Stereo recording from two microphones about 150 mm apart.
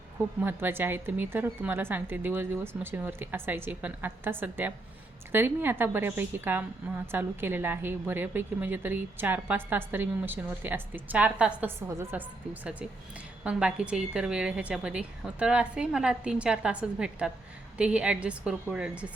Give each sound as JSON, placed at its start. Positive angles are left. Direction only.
{"t": 0.4, "sound": "a woman's voice", "side_deg": -15}
{"t": 13.4, "sound": "a woman's voice", "side_deg": -10}